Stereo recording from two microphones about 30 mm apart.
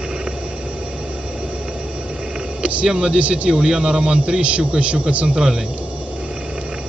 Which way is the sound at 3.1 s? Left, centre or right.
Right.